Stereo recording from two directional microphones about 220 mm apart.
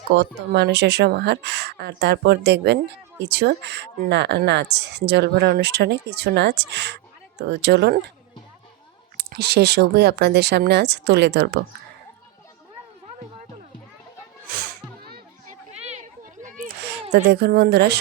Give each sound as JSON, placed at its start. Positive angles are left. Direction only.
{"t": 0.1, "sound": "speech", "side_deg": -50}
{"t": 9.1, "sound": "speech", "side_deg": -45}
{"t": 14.5, "sound": "music", "side_deg": -40}
{"t": 15.7, "sound": "a sound", "side_deg": -30}
{"t": 16.8, "sound": "speech", "side_deg": -50}